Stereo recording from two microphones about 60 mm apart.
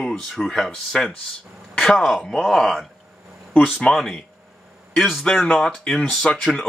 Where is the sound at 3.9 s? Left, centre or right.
Centre.